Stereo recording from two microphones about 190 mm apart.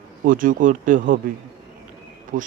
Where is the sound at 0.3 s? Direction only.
45° right (ahead or behind).